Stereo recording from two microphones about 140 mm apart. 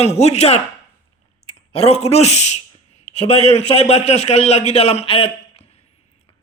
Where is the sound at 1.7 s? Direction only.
50° left (ahead or behind).